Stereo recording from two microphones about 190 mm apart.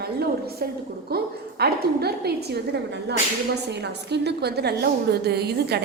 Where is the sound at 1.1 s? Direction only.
55° right (ahead or behind).